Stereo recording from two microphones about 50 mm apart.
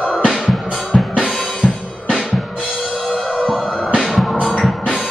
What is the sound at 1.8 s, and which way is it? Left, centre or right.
Music, left.